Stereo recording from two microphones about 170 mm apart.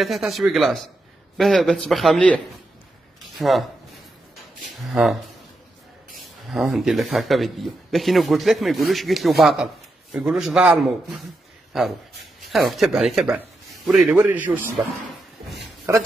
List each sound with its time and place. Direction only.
0.0 s a man's voice: centre (ahead or behind)
4.7 s a man's voice: centre (ahead or behind)
6.5 s a man's voice: centre (ahead or behind)
15.9 s a man's voice: 15° right (ahead or behind)